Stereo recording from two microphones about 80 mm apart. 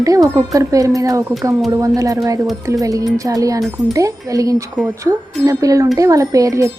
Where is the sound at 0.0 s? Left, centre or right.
Right.